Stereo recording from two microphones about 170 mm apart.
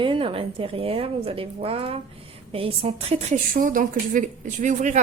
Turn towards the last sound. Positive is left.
turn(degrees=-45)  # may be behind; listen again after turning